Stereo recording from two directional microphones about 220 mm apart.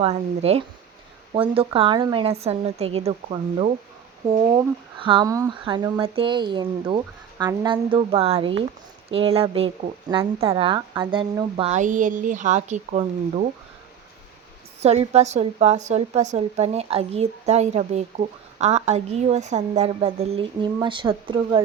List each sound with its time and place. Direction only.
0.0 s speech: 30° right (ahead or behind)
14.8 s speech: 30° right (ahead or behind)